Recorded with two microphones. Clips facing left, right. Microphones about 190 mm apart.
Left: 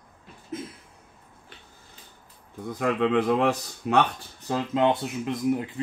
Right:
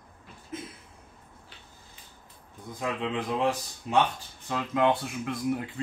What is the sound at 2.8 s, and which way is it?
Speech, 65° left (ahead or behind).